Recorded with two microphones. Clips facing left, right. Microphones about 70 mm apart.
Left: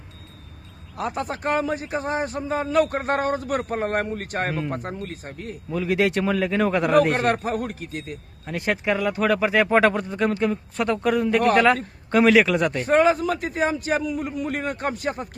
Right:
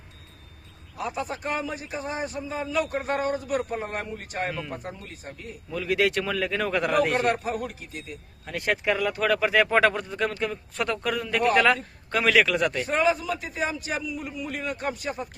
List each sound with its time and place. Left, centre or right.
0.9 s a man's voice: left
5.7 s speech: centre
7.1 s a man's voice: left
8.4 s speech: centre
12.9 s a man's voice: left